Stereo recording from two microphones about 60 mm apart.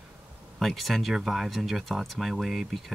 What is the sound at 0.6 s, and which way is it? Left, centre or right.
Speech, centre.